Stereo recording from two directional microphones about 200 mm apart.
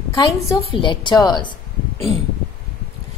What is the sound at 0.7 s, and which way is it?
Speech, 25° left (ahead or behind).